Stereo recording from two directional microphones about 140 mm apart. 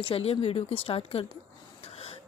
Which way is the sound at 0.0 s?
45° left (ahead or behind).